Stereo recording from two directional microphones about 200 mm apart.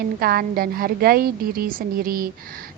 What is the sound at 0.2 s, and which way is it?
A woman's voice, 45° right (ahead or behind).